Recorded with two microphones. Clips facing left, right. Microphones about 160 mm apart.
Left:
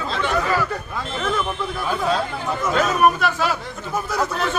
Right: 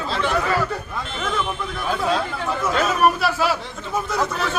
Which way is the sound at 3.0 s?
5° right (ahead or behind).